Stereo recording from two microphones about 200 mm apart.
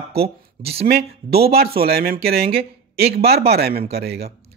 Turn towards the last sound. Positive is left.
turn(degrees=-55)  # may be behind; listen again after turning